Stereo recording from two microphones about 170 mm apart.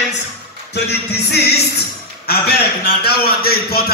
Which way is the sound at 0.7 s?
80° left.